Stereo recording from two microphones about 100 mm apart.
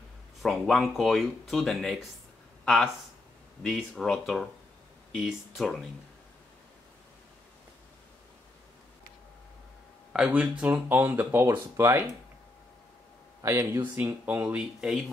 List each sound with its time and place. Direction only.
0.4 s speech: centre (ahead or behind)
10.1 s speech: 10° right (ahead or behind); by 12.1 s 25° right (ahead or behind)
13.4 s speech: 30° right (ahead or behind)
13.9 s speech: 20° right (ahead or behind)